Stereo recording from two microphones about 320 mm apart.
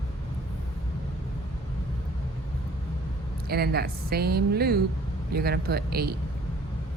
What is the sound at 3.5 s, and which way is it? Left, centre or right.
A woman's voice, right.